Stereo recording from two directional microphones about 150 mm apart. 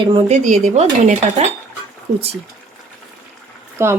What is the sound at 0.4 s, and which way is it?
Dishes, 50° right (ahead or behind).